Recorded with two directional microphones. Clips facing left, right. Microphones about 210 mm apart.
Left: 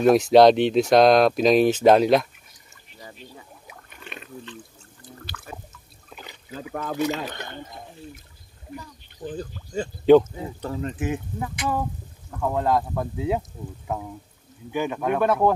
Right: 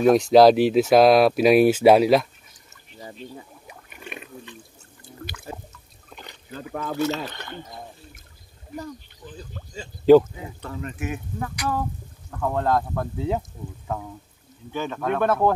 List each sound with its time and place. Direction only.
0.0 s speech: centre (ahead or behind)
3.9 s a sound: 10° right (ahead or behind)
5.2 s water: 15° right (ahead or behind)
6.0 s a sound: 5° left (ahead or behind)
7.0 s speech: 15° left (ahead or behind)
9.2 s speech: 50° left (ahead or behind)
10.3 s speech: 35° left (ahead or behind)
11.3 s speech: 20° left (ahead or behind)
12.3 s speech: 5° left (ahead or behind)